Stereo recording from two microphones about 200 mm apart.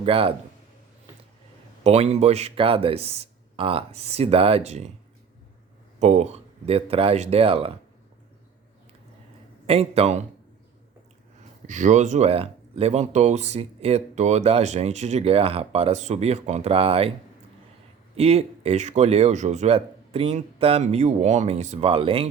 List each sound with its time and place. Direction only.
0.0 s speech: 25° right (ahead or behind)
1.8 s speech: 30° right (ahead or behind)
6.0 s speech: 35° right (ahead or behind)
9.6 s speech: 30° right (ahead or behind)
11.6 s speech: 35° right (ahead or behind)
18.2 s speech: 30° right (ahead or behind)